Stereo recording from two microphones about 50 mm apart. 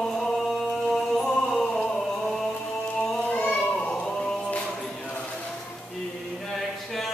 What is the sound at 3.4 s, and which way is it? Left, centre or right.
Children playing, left.